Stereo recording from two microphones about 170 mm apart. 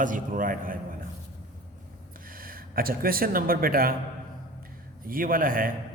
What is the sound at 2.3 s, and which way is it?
Speech, 55° right (ahead or behind).